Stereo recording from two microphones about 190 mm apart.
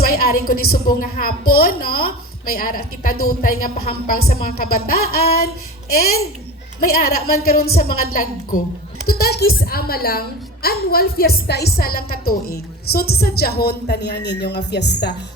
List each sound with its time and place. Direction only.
0.0 s a woman's voice: 50° left (ahead or behind)